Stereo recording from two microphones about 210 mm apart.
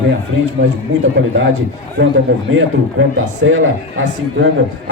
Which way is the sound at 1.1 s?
50° right (ahead or behind).